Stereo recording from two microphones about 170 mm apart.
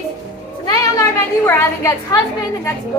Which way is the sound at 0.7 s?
15° left (ahead or behind).